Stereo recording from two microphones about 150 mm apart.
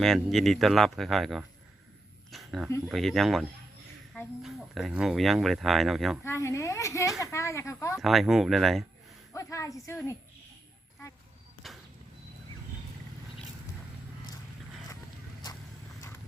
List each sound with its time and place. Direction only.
0.0 s speech: centre (ahead or behind)
2.3 s a sound: centre (ahead or behind)
2.9 s speech: centre (ahead or behind)
6.2 s speech: 20° left (ahead or behind)
7.9 s speech: centre (ahead or behind)
9.3 s speech: 20° left (ahead or behind)
11.6 s a sound: centre (ahead or behind)